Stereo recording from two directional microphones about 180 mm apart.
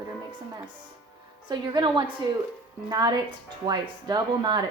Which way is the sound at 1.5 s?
25° right (ahead or behind).